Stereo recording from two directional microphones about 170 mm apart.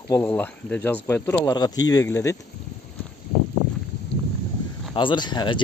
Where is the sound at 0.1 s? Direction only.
10° left (ahead or behind).